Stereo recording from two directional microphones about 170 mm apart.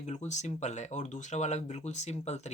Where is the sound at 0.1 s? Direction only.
45° left (ahead or behind).